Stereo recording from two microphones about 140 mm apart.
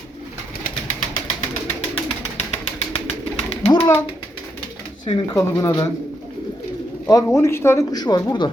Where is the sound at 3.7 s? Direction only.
30° left (ahead or behind).